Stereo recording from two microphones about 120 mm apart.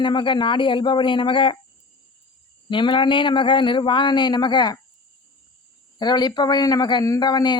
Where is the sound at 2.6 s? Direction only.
45° left (ahead or behind).